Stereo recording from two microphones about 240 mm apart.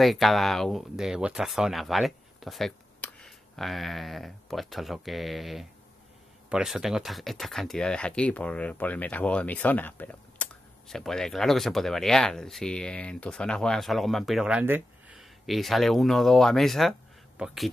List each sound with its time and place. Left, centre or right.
0.0 s speech: centre